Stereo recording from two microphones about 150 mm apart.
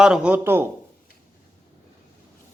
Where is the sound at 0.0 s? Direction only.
5° right (ahead or behind).